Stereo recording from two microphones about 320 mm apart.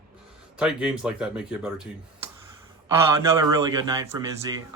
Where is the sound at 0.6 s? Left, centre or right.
Centre.